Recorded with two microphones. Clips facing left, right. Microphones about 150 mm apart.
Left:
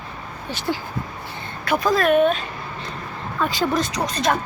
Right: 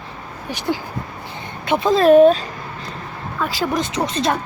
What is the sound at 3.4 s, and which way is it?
Speech, 5° right (ahead or behind).